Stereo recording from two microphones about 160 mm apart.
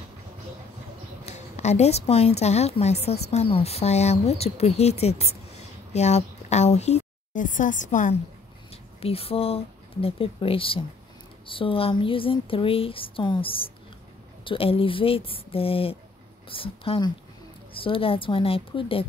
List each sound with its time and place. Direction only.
1.2 s a woman's voice: 45° left (ahead or behind)
9.0 s a woman's voice: 40° left (ahead or behind)